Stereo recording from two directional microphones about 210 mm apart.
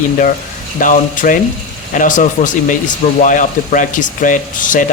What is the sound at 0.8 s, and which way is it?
Speech, 40° left (ahead or behind).